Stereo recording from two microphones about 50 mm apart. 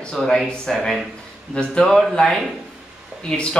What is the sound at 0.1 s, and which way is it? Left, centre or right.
Speech, centre.